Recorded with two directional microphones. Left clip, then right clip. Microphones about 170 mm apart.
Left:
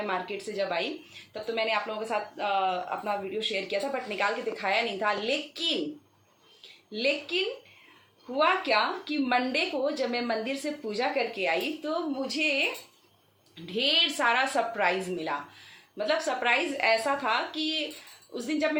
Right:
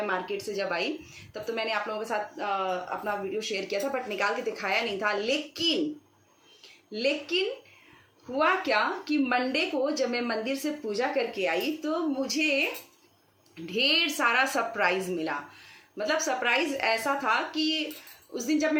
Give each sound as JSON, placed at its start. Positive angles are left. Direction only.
{"t": 0.0, "sound": "a woman's voice", "side_deg": -10}
{"t": 6.9, "sound": "a woman's voice", "side_deg": -15}
{"t": 13.7, "sound": "a woman's voice", "side_deg": -10}